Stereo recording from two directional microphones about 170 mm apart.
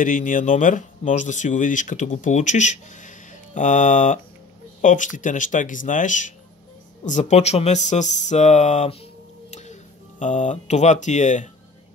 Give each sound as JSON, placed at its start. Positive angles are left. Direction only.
{"t": 0.0, "sound": "speech", "side_deg": 50}